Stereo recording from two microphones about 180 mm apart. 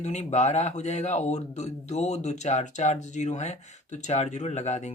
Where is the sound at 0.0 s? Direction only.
40° left (ahead or behind).